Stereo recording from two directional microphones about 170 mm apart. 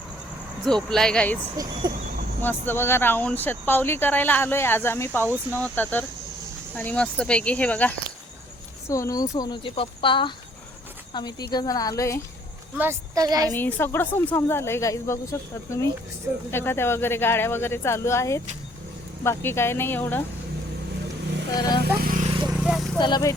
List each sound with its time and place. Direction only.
0.6 s speech: 5° left (ahead or behind)
1.5 s a woman's voice: 25° right (ahead or behind)
2.4 s speech: 10° left (ahead or behind)
5.2 s speech: 15° right (ahead or behind)
5.5 s speech: 10° left (ahead or behind)
8.9 s a woman's voice: 20° left (ahead or behind)
12.7 s a woman's voice: 15° right (ahead or behind)
13.5 s speech: 10° left (ahead or behind)
21.5 s speech: 20° left (ahead or behind)
21.8 s vehicle: 60° right (ahead or behind)
22.6 s a sound: centre (ahead or behind)
23.0 s a woman's voice: 25° left (ahead or behind)